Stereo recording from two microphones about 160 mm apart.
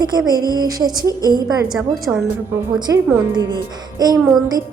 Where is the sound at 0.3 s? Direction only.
25° right (ahead or behind).